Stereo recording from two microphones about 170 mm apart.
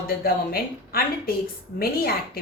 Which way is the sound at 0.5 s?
60° left (ahead or behind).